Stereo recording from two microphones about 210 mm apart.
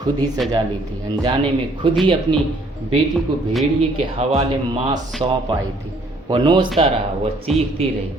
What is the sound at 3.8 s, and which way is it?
Speech, 30° right (ahead or behind).